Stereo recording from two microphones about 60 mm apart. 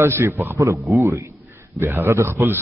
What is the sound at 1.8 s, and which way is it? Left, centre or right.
Speech, right.